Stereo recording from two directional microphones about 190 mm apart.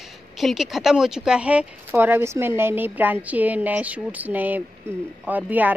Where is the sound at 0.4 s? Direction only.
Centre (ahead or behind).